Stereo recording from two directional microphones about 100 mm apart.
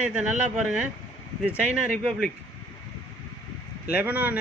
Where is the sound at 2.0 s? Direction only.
Centre (ahead or behind).